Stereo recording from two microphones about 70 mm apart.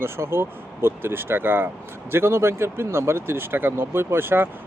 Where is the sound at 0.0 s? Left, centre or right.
Right.